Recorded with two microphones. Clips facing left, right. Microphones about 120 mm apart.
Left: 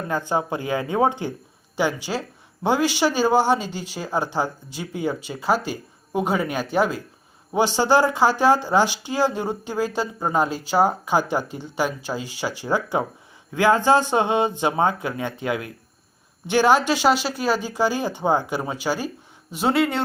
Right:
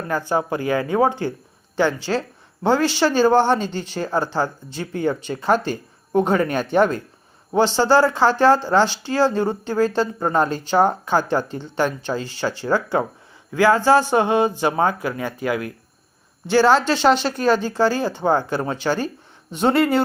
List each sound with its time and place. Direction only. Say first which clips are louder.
0.1 s speech: right 3 dB; 15° left (ahead or behind); by 20.0 s centre (ahead or behind)